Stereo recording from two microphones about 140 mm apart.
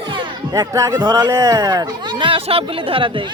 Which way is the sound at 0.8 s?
25° right (ahead or behind).